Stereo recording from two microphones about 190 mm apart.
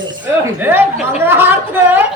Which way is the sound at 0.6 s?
10° right (ahead or behind).